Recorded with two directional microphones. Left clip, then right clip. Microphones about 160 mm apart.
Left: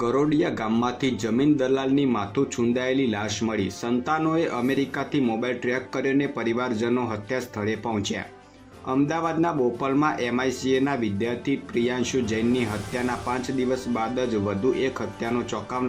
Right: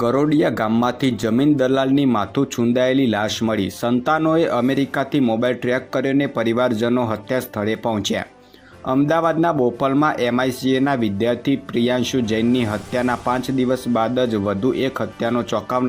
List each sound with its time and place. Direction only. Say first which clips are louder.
0.0 s speech: right 5 dB; 30° right (ahead or behind)